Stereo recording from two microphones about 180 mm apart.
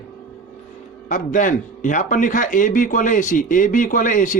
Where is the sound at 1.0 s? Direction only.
45° left (ahead or behind).